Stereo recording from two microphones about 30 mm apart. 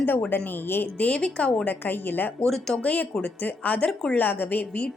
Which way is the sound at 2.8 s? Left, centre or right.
Left.